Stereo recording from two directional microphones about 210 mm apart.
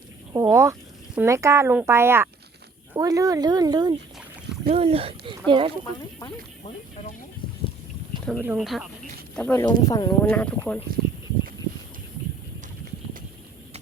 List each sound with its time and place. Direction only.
0.3 s speech: 15° right (ahead or behind)
6.7 s a sound: 30° left (ahead or behind)
8.3 s speech: 5° right (ahead or behind)
9.6 s speech: 20° left (ahead or behind)